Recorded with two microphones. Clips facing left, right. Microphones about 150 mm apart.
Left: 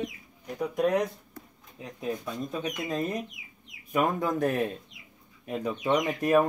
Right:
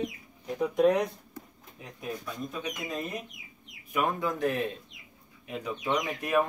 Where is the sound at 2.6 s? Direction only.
40° left (ahead or behind).